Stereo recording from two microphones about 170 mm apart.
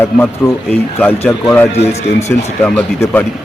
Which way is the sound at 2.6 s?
10° left (ahead or behind).